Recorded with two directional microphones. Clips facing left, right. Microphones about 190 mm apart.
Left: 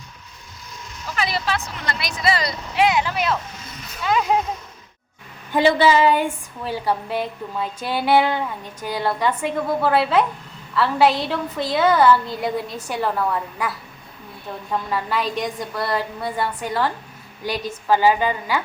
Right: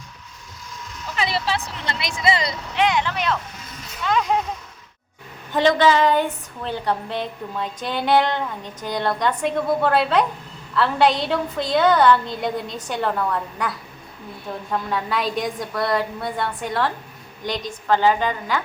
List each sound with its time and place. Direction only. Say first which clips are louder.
1.1 s a woman's voice: even; 25° right (ahead or behind)
2.7 s a woman's voice: left 2 dB; 10° left (ahead or behind)
5.5 s a woman's voice: left 1 dB; 10° left (ahead or behind)